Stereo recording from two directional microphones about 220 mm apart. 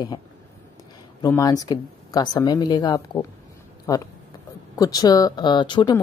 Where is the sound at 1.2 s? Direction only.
15° left (ahead or behind).